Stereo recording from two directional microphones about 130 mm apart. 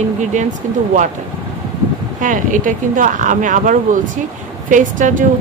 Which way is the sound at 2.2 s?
85° right.